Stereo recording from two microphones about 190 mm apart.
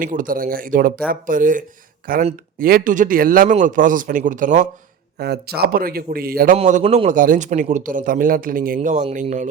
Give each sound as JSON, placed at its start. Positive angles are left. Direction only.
{"t": 0.0, "sound": "a man's voice", "side_deg": -45}
{"t": 5.1, "sound": "a man's voice", "side_deg": -60}
{"t": 6.6, "sound": "a man's voice", "side_deg": -35}